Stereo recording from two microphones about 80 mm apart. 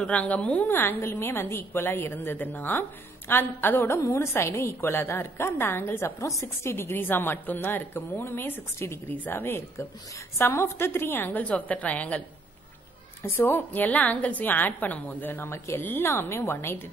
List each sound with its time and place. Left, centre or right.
0.0 s a woman's voice: centre
13.2 s a woman's voice: left